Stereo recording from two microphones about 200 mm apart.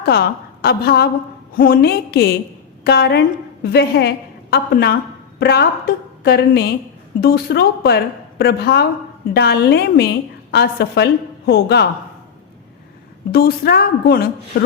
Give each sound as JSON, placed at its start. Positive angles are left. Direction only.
{"t": 0.0, "sound": "a woman's voice", "side_deg": 50}
{"t": 13.3, "sound": "a woman's voice", "side_deg": 50}